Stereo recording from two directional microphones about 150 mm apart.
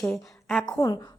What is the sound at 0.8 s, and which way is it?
Speech, 20° left (ahead or behind).